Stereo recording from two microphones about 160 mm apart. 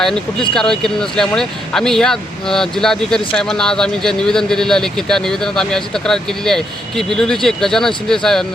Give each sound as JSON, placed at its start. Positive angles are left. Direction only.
{"t": 0.0, "sound": "speech", "side_deg": 5}